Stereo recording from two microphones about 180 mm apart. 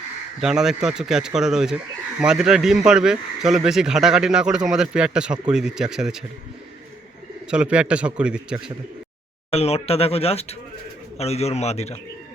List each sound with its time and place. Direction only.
0.3 s a man's voice: 5° right (ahead or behind)
7.5 s a man's voice: 5° right (ahead or behind)
9.5 s speech: 35° left (ahead or behind)